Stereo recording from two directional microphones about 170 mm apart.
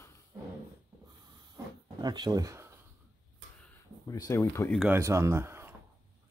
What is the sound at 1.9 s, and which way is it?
Speech, 25° right (ahead or behind).